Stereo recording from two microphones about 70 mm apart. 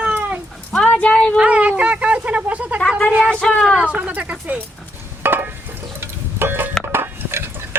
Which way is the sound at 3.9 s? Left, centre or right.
Centre.